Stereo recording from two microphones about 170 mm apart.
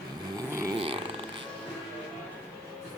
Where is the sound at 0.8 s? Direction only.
35° right (ahead or behind).